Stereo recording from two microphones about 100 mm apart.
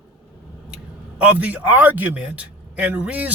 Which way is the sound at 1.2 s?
15° right (ahead or behind).